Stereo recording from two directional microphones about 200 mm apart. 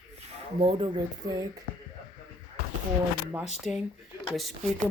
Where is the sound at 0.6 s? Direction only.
25° right (ahead or behind).